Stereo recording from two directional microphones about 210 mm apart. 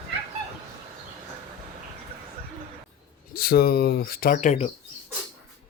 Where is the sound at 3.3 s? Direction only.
45° left (ahead or behind).